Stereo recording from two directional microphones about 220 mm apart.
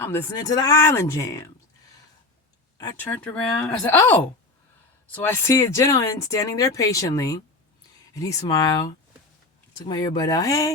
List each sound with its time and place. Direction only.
0.0 s speech: 10° left (ahead or behind)
2.7 s speech: 15° left (ahead or behind)